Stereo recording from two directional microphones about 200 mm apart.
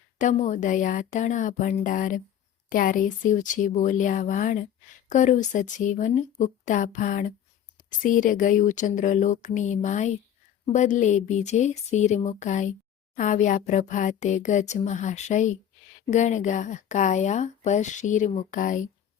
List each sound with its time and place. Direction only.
0.2 s speech: 40° left (ahead or behind)